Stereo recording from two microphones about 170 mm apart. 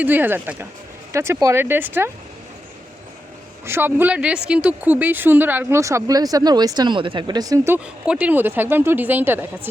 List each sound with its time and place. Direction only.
0.0 s speech: 10° right (ahead or behind)
3.7 s speech: 10° right (ahead or behind)
8.0 s speech: 5° right (ahead or behind)